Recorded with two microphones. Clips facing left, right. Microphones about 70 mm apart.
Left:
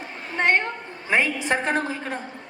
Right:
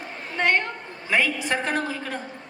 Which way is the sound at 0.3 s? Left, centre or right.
Left.